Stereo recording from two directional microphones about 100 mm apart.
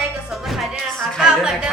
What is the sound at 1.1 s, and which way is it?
Speech, 5° right (ahead or behind).